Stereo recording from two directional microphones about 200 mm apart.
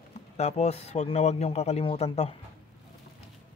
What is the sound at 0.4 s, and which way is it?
Speech, 35° left (ahead or behind).